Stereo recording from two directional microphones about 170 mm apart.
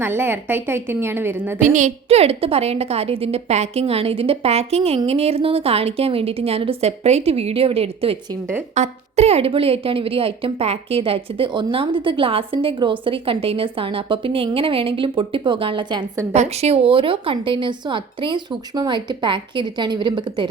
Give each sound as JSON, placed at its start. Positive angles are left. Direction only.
{"t": 0.0, "sound": "a woman's voice", "side_deg": -15}
{"t": 1.5, "sound": "a woman's voice", "side_deg": -45}
{"t": 16.3, "sound": "speech", "side_deg": -40}